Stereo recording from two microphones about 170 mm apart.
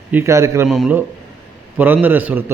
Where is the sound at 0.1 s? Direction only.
15° right (ahead or behind).